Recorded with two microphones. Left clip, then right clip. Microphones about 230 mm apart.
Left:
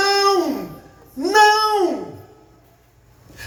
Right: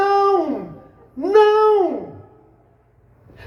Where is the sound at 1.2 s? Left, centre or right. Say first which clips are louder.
Even; right.